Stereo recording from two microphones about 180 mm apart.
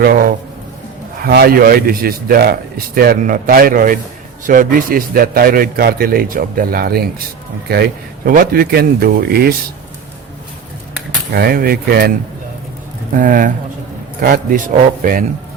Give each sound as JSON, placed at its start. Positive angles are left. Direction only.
{"t": 0.0, "sound": "a man's voice", "side_deg": -55}
{"t": 11.3, "sound": "a man's voice", "side_deg": -55}
{"t": 13.1, "sound": "a man's voice", "side_deg": -45}